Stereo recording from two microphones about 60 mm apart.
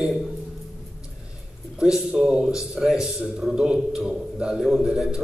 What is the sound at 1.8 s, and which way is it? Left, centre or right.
A man's voice, centre.